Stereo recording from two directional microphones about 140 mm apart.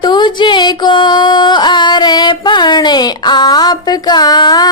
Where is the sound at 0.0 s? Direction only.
35° left (ahead or behind).